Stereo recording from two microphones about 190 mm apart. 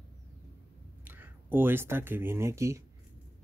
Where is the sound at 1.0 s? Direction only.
10° right (ahead or behind).